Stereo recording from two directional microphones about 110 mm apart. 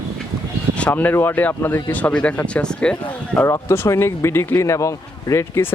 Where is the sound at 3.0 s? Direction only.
15° left (ahead or behind).